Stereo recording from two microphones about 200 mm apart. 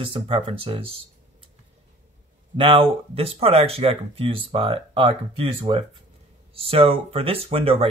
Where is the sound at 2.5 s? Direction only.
25° right (ahead or behind).